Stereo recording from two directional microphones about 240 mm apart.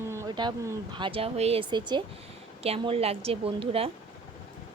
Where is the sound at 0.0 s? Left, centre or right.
Centre.